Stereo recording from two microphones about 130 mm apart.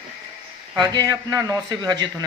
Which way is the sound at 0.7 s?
30° right (ahead or behind).